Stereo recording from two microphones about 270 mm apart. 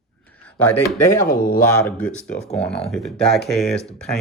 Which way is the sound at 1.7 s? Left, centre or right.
Centre.